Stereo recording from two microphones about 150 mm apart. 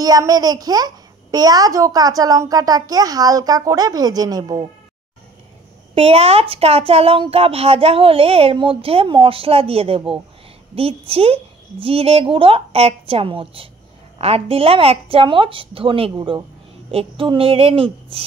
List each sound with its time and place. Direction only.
0.0 s a child's voice: 25° right (ahead or behind)
5.9 s speech: 40° right (ahead or behind)